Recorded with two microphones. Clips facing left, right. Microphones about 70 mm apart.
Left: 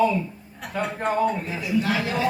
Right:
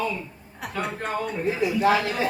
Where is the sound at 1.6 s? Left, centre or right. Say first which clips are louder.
Right 4 dB; right.